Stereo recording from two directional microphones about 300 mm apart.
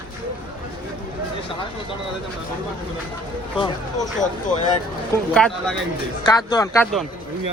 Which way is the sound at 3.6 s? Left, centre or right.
Centre.